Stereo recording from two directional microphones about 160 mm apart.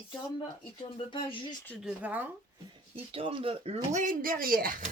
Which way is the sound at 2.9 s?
35° right (ahead or behind).